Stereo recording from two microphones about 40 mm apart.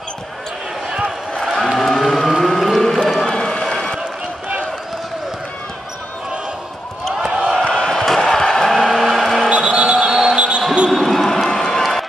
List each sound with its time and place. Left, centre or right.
1.4 s music: centre
3.3 s a sound: centre
7.2 s a sound: centre
7.6 s crowd: left
7.9 s crowd: centre
8.3 s a sound: centre
9.5 s basketball bounce: right
10.9 s basketball bounce: centre
11.2 s run: centre